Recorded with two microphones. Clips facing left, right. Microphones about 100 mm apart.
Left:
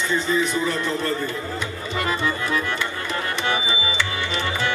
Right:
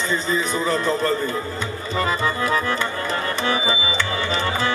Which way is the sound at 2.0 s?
35° right (ahead or behind).